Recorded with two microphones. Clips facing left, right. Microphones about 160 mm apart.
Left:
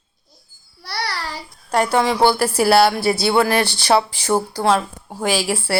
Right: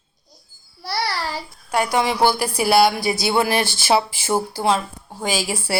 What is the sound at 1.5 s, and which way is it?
Speech, 10° right (ahead or behind).